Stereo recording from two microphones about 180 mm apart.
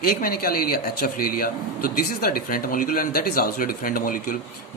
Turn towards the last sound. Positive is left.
turn(degrees=50)  # may be behind; listen again after turning